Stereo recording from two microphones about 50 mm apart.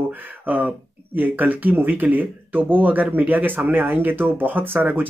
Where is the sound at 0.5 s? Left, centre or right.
Right.